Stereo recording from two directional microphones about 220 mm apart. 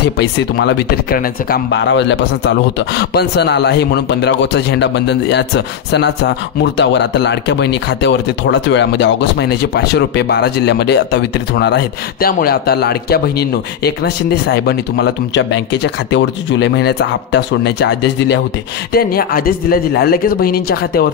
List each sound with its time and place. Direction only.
0.0 s speech: 50° left (ahead or behind)
18.9 s speech: 40° left (ahead or behind)